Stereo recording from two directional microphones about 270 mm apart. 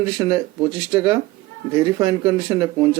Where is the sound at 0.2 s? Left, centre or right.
Centre.